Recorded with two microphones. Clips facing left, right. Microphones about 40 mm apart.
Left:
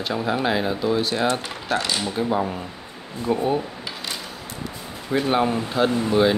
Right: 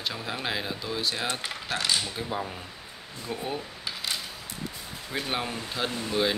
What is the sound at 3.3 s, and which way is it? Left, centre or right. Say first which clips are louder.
Speech: left 12 dB; centre.